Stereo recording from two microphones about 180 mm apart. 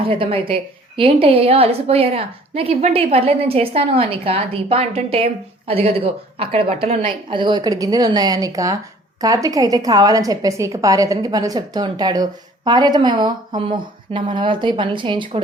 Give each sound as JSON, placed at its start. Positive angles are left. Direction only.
{"t": 0.0, "sound": "a woman's voice", "side_deg": -30}